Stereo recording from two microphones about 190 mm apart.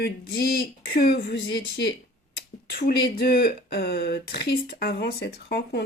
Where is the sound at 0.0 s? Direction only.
55° left (ahead or behind).